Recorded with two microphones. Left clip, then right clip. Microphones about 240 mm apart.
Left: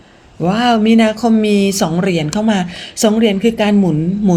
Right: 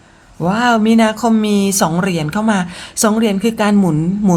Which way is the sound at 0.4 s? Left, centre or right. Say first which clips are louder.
Even; centre.